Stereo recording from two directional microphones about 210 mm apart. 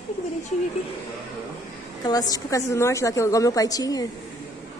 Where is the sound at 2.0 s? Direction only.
20° left (ahead or behind).